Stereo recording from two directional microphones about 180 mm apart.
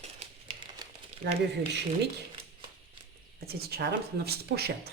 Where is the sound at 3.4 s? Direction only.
60° right (ahead or behind).